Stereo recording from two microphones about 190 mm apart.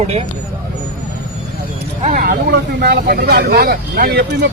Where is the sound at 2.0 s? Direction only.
50° right (ahead or behind).